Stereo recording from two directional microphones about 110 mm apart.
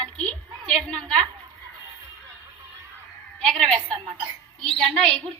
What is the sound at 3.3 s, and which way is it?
A woman's voice, 5° left (ahead or behind).